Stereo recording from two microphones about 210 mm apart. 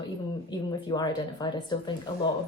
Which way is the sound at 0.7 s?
20° left (ahead or behind).